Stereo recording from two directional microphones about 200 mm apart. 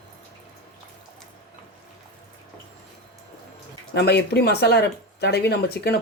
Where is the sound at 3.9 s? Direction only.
55° left (ahead or behind).